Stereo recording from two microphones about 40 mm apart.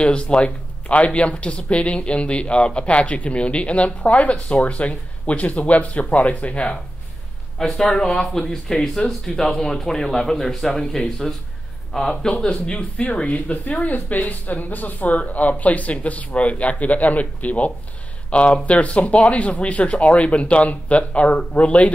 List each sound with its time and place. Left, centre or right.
0.0 s speech: left
7.5 s speech: centre; by 21.9 s left